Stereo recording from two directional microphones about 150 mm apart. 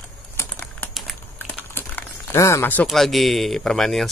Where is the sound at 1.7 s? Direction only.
15° left (ahead or behind).